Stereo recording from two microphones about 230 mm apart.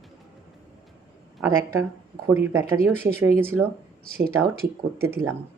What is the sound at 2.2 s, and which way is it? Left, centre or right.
Speech, centre.